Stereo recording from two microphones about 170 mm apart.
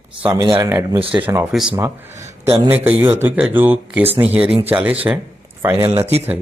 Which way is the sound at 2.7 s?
10° right (ahead or behind).